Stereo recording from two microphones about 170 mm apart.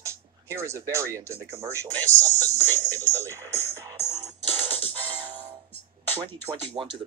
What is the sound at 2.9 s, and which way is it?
Speech, 20° right (ahead or behind).